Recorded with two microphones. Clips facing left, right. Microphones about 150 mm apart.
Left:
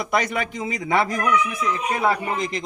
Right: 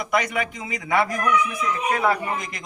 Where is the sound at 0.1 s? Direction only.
30° left (ahead or behind).